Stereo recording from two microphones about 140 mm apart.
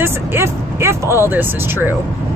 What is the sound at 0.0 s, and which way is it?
Vehicle, 15° right (ahead or behind).